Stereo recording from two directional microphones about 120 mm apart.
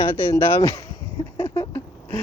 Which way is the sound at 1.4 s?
25° left (ahead or behind).